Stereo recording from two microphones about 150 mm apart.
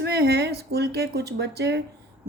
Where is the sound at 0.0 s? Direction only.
90° right.